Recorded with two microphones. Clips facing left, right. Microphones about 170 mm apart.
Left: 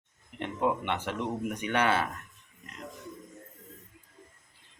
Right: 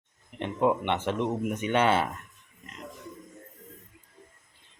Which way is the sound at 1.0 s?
25° right (ahead or behind).